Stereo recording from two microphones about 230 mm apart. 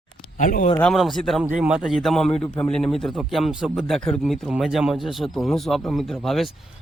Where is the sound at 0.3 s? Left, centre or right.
Left.